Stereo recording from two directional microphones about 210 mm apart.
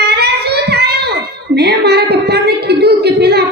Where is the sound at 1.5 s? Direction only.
50° right (ahead or behind).